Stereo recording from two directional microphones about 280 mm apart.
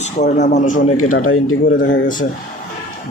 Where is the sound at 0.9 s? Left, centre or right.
Left.